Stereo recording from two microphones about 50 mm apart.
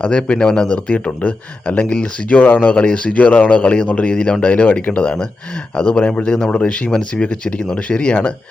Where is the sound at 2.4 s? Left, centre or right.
Left.